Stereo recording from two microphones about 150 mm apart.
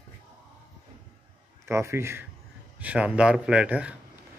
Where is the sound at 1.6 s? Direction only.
20° right (ahead or behind).